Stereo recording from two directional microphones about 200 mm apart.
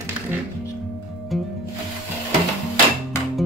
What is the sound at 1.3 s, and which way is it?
Music, centre (ahead or behind).